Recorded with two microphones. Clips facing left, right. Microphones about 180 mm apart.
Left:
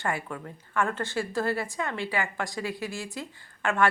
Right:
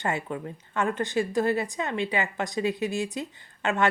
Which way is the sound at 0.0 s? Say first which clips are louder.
Right 2 dB; 20° right (ahead or behind).